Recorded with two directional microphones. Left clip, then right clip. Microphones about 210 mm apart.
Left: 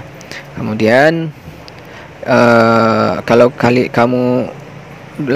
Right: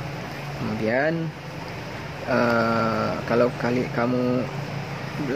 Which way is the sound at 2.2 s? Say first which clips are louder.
Left 13 dB; 45° left (ahead or behind).